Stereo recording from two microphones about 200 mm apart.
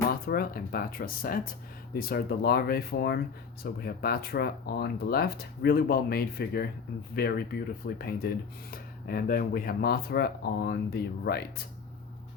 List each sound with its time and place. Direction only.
0.1 s speech: 50° left (ahead or behind)